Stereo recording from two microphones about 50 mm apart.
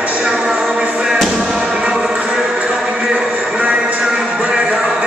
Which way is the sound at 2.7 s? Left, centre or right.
Centre.